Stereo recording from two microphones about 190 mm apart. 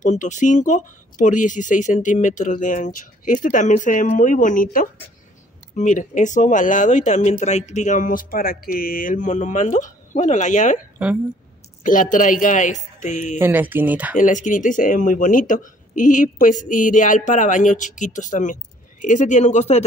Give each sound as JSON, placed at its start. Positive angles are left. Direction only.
{"t": 0.0, "sound": "speech", "side_deg": 40}
{"t": 11.0, "sound": "speech", "side_deg": -5}
{"t": 11.8, "sound": "speech", "side_deg": 45}
{"t": 13.4, "sound": "speech", "side_deg": -10}
{"t": 14.1, "sound": "speech", "side_deg": 40}